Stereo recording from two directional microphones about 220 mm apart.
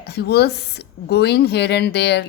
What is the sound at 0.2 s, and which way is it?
A woman's voice, 50° left (ahead or behind).